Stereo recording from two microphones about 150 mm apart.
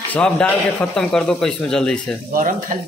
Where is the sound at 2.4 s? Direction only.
60° right (ahead or behind).